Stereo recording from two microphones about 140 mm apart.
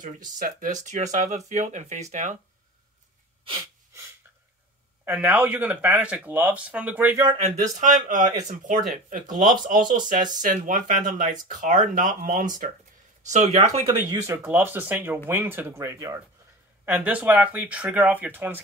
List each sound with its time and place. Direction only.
0.0 s speech: 65° right (ahead or behind)
5.0 s speech: 15° right (ahead or behind)
7.4 s speech: 65° right (ahead or behind)
13.3 s speech: 55° right (ahead or behind)
13.8 s speech: 20° right (ahead or behind)
16.8 s speech: 10° right (ahead or behind)